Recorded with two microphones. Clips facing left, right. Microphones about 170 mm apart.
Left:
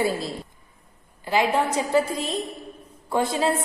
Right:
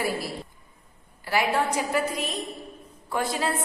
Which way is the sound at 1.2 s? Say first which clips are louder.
Left 3 dB; 20° left (ahead or behind).